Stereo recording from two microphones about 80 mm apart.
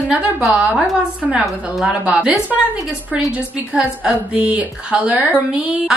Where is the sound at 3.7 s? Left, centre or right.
Centre.